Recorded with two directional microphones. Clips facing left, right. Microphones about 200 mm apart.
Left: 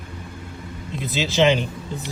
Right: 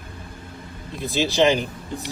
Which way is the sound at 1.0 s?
20° left (ahead or behind).